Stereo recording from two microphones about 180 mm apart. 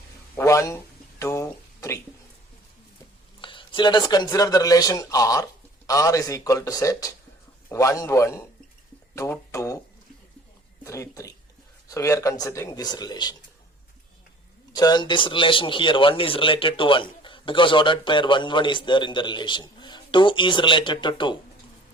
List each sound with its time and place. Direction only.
0.3 s a man's voice: 15° left (ahead or behind)
3.4 s a man's voice: 25° left (ahead or behind)
9.1 s a sound: 15° left (ahead or behind)
10.8 s a sound: 15° left (ahead or behind)
11.9 s a man's voice: 15° left (ahead or behind)
14.7 s a man's voice: 20° left (ahead or behind)